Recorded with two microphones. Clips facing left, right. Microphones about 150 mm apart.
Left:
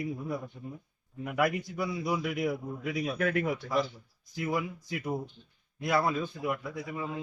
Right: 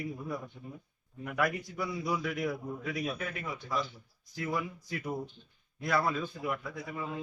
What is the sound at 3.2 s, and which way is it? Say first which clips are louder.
Speech: left 10 dB; 70° left (ahead or behind).